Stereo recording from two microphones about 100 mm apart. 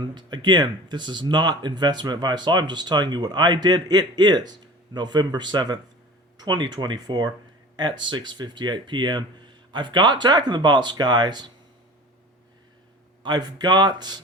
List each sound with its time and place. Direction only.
0.0 s speech: 50° right (ahead or behind)
13.2 s speech: 45° right (ahead or behind)